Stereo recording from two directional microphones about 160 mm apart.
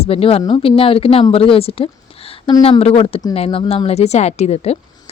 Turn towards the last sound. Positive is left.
turn(degrees=40)  # may be behind; listen again after turning